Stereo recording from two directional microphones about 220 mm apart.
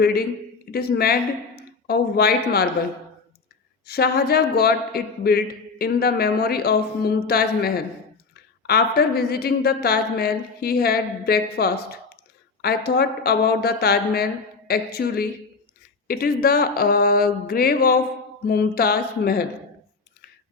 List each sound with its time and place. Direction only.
0.0 s a woman's voice: 45° left (ahead or behind)
3.8 s a woman's voice: 45° left (ahead or behind)